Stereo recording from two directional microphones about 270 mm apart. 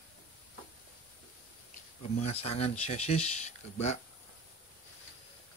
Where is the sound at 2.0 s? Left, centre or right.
Left.